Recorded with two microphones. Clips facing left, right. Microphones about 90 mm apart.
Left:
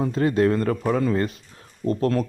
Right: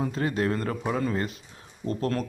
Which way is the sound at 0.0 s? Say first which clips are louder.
Left 7 dB; 35° left (ahead or behind).